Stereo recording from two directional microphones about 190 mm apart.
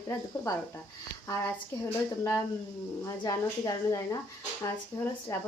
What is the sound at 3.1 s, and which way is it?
A woman's voice, 20° left (ahead or behind).